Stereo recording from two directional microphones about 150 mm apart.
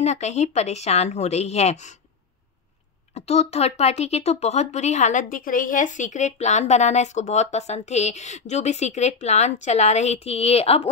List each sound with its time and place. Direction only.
0.0 s speech: 50° left (ahead or behind)
3.2 s speech: 45° left (ahead or behind)